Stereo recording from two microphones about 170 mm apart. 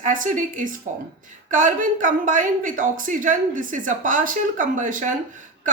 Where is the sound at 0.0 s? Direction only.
50° right (ahead or behind).